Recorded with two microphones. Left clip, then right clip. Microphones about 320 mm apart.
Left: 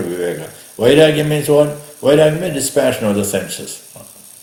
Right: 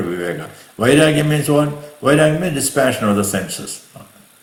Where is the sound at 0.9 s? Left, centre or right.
Centre.